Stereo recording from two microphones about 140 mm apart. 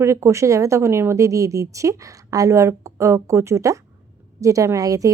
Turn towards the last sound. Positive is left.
turn(degrees=-25)  # may be behind; listen again after turning